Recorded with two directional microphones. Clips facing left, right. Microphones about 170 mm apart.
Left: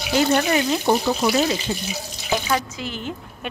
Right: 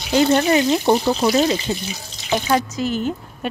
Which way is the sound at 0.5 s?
20° right (ahead or behind).